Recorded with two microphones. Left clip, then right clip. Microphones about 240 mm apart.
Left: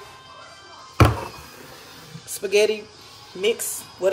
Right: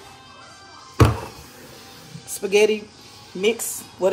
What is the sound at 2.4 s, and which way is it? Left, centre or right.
Speech, centre.